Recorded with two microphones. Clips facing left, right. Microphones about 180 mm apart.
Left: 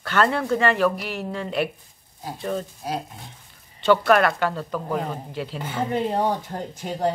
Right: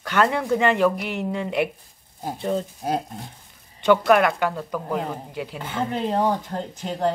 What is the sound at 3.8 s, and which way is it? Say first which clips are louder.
Speech: right 1 dB; 15° right (ahead or behind).